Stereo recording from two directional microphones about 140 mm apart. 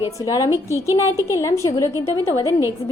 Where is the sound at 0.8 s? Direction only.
20° right (ahead or behind).